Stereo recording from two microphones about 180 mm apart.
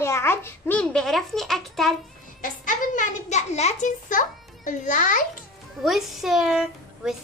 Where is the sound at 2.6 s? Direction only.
45° left (ahead or behind).